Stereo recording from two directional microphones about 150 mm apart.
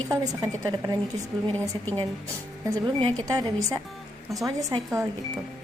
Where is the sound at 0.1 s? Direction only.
20° right (ahead or behind).